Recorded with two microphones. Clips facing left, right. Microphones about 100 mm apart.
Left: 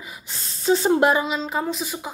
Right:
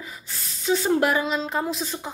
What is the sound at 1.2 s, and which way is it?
Speech, centre (ahead or behind).